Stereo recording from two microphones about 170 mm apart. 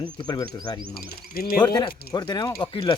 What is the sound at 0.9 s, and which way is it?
Speech, 65° left (ahead or behind).